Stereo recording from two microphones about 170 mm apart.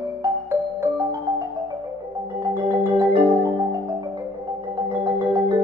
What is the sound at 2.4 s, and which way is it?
Music, 15° right (ahead or behind).